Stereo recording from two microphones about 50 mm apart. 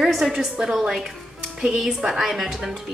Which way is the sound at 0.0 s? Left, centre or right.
Centre.